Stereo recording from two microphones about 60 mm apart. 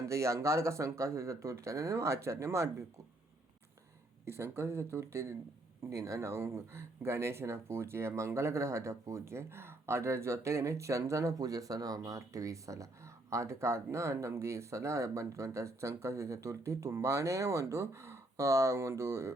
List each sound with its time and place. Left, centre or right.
0.0 s speech: right
4.3 s speech: right